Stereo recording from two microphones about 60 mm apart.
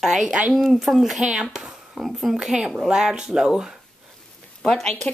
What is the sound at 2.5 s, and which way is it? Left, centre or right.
Speech, centre.